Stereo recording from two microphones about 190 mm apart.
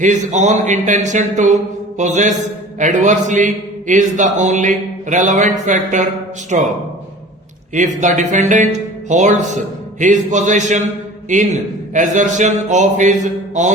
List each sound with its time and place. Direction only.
0.0 s a man's voice: 40° right (ahead or behind)
7.7 s a man's voice: 40° right (ahead or behind)